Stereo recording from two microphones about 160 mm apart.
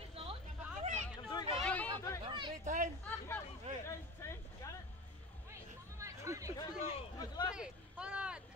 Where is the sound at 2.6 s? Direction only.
50° right (ahead or behind).